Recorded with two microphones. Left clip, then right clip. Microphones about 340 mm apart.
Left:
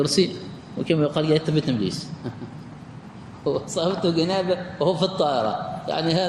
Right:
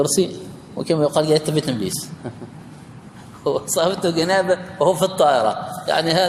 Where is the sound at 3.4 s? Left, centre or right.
Right.